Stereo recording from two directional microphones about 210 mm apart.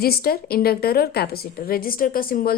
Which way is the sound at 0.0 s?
45° left (ahead or behind).